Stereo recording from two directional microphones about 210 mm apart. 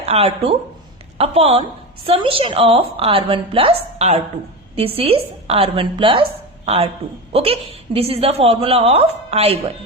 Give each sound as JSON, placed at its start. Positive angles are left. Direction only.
{"t": 0.0, "sound": "a woman's voice", "side_deg": -30}